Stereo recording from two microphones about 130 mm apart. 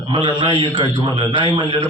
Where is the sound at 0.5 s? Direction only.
40° left (ahead or behind).